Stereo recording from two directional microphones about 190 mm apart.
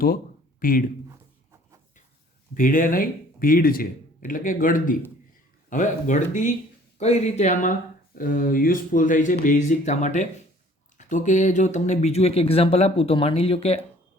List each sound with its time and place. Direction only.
0.6 s speech: 45° left (ahead or behind)
2.6 s speech: 45° left (ahead or behind)